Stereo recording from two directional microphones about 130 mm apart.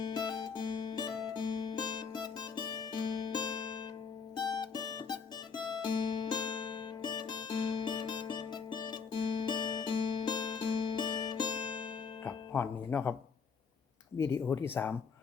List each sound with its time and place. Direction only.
0.0 s music: 35° left (ahead or behind)
12.2 s music: 15° left (ahead or behind)
14.2 s speech: 20° left (ahead or behind)